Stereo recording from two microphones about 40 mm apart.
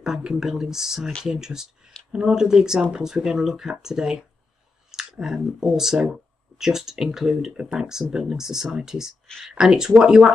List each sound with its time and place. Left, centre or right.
0.0 s speech: centre